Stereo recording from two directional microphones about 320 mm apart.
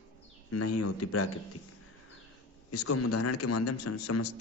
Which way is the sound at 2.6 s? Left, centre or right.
Left.